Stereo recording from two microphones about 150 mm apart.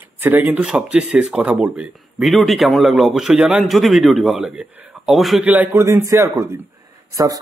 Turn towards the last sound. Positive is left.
turn(degrees=-25)  # may be behind; listen again after turning